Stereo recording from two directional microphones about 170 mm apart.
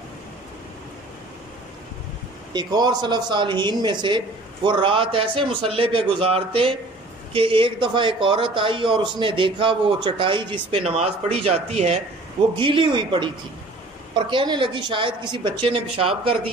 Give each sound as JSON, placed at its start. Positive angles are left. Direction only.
{"t": 2.5, "sound": "a man's voice", "side_deg": -25}